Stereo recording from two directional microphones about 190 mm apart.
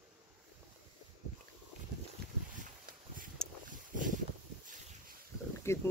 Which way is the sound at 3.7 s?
45° right (ahead or behind).